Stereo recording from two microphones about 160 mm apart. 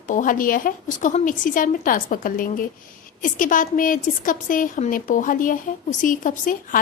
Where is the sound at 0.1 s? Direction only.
55° left (ahead or behind).